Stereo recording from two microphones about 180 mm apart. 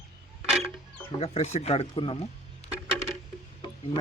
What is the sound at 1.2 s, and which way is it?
Speech, 40° left (ahead or behind).